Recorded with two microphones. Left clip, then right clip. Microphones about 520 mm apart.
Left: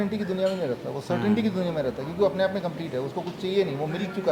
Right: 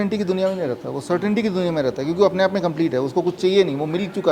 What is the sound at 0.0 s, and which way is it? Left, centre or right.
A man's voice, right.